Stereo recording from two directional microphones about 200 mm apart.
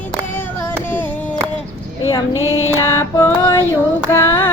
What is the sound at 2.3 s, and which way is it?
Music, 90° left.